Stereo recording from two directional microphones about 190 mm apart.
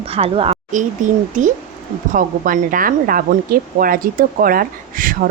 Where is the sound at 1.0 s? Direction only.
40° right (ahead or behind).